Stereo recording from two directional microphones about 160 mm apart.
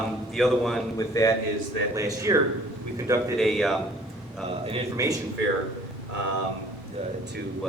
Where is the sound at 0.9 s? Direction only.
20° left (ahead or behind).